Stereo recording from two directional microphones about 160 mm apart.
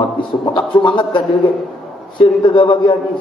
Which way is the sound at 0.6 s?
30° left (ahead or behind).